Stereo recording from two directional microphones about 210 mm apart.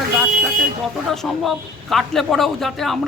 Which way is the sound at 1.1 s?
Centre (ahead or behind).